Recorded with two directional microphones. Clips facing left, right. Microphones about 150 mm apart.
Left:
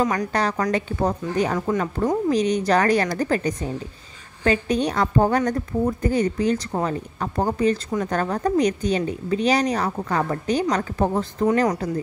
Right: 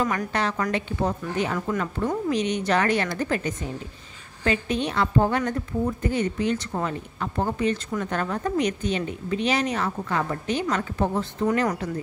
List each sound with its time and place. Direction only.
0.3 s a woman's voice: 40° left (ahead or behind)